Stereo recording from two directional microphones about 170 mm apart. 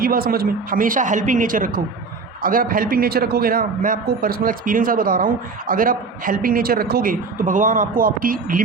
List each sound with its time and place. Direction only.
0.0 s a man's voice: 60° right (ahead or behind)